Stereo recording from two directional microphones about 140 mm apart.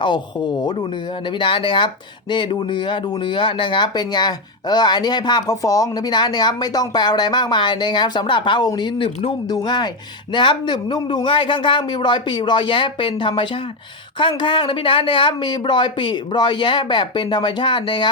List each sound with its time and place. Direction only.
0.0 s speech: 35° left (ahead or behind)
9.5 s speech: 30° left (ahead or behind)